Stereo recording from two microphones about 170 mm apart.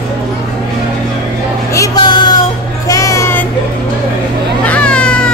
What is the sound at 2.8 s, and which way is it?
Music, 20° left (ahead or behind).